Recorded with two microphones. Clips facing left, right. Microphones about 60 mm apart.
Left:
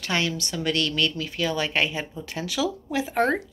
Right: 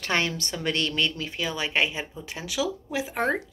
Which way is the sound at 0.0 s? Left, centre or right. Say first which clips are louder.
Even; right.